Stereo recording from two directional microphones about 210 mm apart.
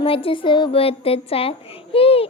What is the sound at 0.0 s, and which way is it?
Speech, 25° left (ahead or behind).